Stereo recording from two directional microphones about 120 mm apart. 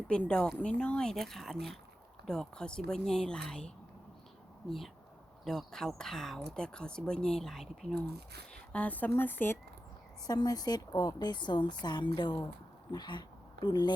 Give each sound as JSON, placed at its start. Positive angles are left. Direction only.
{"t": 0.1, "sound": "speech", "side_deg": 10}
{"t": 5.5, "sound": "speech", "side_deg": 5}
{"t": 8.7, "sound": "speech", "side_deg": 15}
{"t": 10.2, "sound": "a woman's voice", "side_deg": 30}